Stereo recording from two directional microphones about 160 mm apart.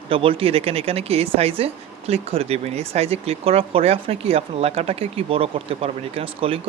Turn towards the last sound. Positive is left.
turn(degrees=-35)  # may be behind; listen again after turning